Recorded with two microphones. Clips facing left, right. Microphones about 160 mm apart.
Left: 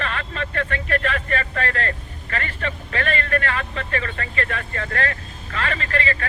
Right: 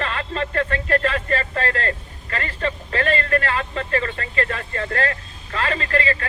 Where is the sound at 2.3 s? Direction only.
35° right (ahead or behind).